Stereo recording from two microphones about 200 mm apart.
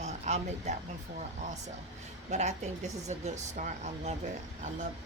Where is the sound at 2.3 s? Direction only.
35° right (ahead or behind).